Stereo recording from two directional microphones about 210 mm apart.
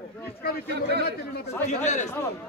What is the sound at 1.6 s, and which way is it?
Speech, 35° left (ahead or behind).